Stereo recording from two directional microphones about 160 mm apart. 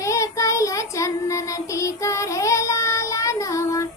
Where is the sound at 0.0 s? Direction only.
20° left (ahead or behind).